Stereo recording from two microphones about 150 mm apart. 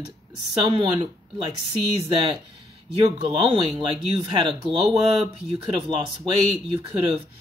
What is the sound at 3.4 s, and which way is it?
Speech, 30° right (ahead or behind).